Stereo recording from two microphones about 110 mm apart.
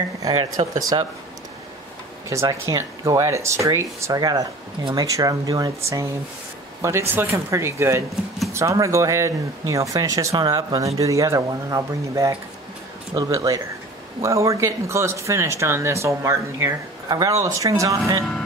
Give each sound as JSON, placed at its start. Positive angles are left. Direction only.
{"t": 0.3, "sound": "speech", "side_deg": -65}
{"t": 0.7, "sound": "speech", "side_deg": -35}
{"t": 2.6, "sound": "speech", "side_deg": -30}